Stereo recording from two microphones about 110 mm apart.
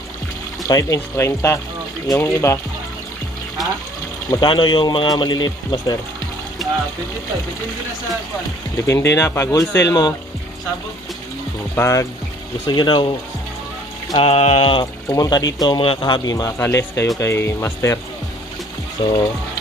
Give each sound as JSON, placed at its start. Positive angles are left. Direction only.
{"t": 0.7, "sound": "speech", "side_deg": 30}
{"t": 4.4, "sound": "speech", "side_deg": 45}
{"t": 8.8, "sound": "speech", "side_deg": 25}
{"t": 11.7, "sound": "speech", "side_deg": 25}
{"t": 12.6, "sound": "speech", "side_deg": 45}
{"t": 14.1, "sound": "a sound", "side_deg": 55}
{"t": 15.0, "sound": "speech", "side_deg": 35}
{"t": 15.8, "sound": "speech", "side_deg": 50}
{"t": 16.5, "sound": "speech", "side_deg": 25}
{"t": 19.0, "sound": "speech", "side_deg": 45}